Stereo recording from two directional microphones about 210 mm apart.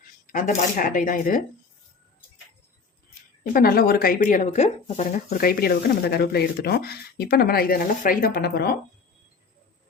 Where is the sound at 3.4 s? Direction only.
45° left (ahead or behind).